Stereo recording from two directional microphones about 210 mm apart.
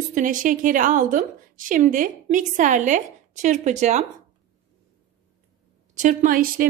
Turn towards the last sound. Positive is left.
turn(degrees=-40)  # may be behind; listen again after turning